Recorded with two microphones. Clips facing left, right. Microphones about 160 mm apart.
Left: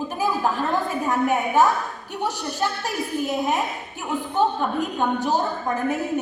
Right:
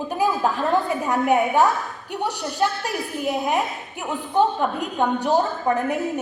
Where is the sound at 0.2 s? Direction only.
15° right (ahead or behind).